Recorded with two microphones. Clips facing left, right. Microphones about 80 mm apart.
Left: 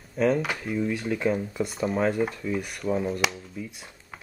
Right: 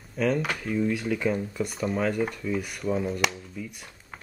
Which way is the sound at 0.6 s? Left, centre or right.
Centre.